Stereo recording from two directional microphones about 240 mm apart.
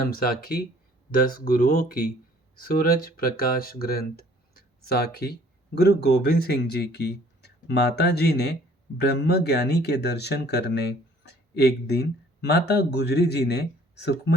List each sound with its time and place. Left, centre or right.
0.1 s speech: left